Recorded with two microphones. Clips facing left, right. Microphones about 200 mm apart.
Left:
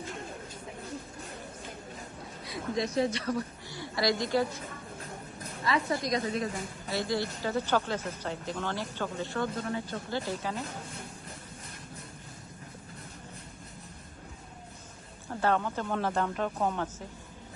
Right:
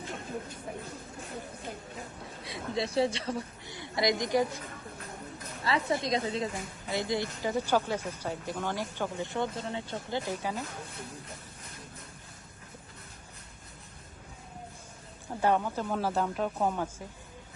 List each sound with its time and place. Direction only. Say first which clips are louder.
2.4 s a woman's voice: left 1 dB; 30° right (ahead or behind)
5.6 s a woman's voice: even; 25° right (ahead or behind)
15.4 s speech: right 1 dB; 15° right (ahead or behind)